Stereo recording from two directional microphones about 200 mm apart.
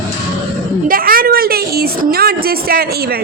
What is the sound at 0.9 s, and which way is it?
A woman's voice, 45° right (ahead or behind).